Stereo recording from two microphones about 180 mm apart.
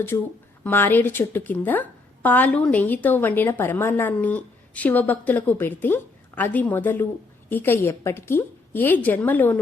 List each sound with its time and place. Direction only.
0.1 s a woman's voice: 20° left (ahead or behind)